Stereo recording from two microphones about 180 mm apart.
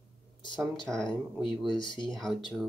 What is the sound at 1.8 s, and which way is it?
Speech, 25° left (ahead or behind).